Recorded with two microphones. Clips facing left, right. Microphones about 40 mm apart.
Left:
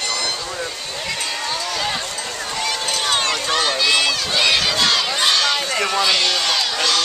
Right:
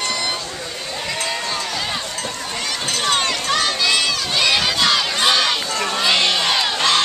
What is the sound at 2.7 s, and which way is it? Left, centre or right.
Run, centre.